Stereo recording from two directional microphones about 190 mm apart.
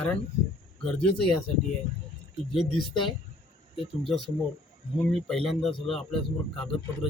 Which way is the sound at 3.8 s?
Centre (ahead or behind).